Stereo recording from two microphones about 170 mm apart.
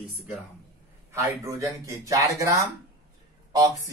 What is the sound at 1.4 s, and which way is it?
Speech, 20° right (ahead or behind).